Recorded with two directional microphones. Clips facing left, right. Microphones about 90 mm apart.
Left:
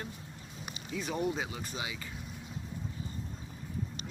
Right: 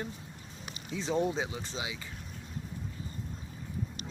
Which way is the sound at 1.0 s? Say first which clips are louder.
Right 3 dB; 25° right (ahead or behind).